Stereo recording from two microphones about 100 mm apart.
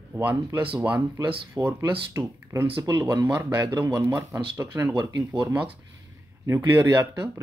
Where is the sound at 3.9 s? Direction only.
35° right (ahead or behind).